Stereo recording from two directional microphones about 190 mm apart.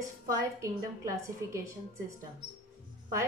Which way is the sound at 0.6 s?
15° right (ahead or behind).